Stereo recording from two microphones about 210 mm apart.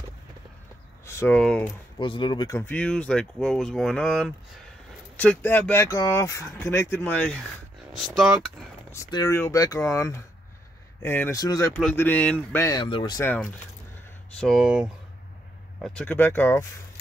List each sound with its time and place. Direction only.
1.0 s speech: 10° left (ahead or behind)
2.0 s speech: 25° left (ahead or behind); by 8.6 s centre (ahead or behind)
8.9 s speech: 15° left (ahead or behind)
13.2 s speech: 10° left (ahead or behind)